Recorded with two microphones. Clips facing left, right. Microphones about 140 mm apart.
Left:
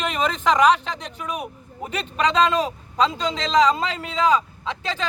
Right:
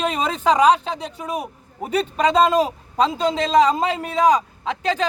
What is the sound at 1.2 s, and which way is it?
A man's voice, 35° right (ahead or behind).